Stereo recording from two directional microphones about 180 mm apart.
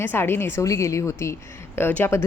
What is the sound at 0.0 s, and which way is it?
Speech, 10° left (ahead or behind).